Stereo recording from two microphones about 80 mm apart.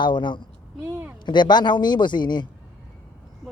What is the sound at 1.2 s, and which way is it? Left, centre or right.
Speech, left.